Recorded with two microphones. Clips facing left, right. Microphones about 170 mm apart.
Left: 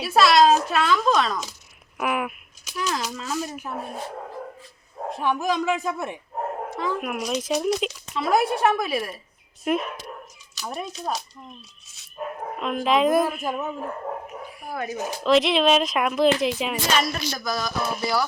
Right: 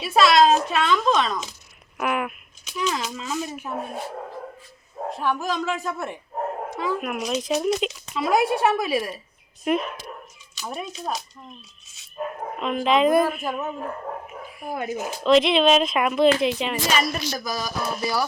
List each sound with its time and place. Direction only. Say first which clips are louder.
0.0 s speech: even; centre (ahead or behind)
5.1 s speech: left 2 dB; 15° left (ahead or behind)
6.7 s speech: right 1 dB; centre (ahead or behind)
12.5 s speech: right 1 dB; centre (ahead or behind)
14.7 s speech: right 2 dB; 15° right (ahead or behind)
15.2 s speech: right 2 dB; centre (ahead or behind)
17.0 s speech: right 1 dB; 10° right (ahead or behind)